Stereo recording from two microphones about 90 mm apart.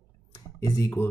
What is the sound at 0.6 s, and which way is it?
Speech, 45° left (ahead or behind).